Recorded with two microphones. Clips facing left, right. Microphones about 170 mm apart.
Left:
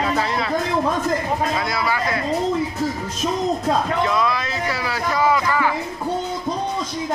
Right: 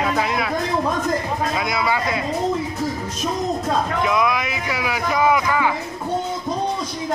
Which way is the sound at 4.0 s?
15° right (ahead or behind).